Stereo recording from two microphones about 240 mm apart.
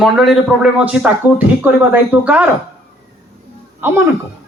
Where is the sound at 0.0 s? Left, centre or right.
Centre.